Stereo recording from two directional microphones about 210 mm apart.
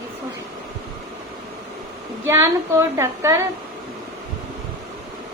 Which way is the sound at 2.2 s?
15° right (ahead or behind).